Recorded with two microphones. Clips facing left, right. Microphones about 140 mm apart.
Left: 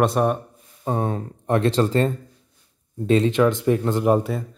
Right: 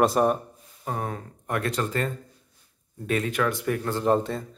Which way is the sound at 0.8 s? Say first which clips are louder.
Left 7 dB; 25° left (ahead or behind).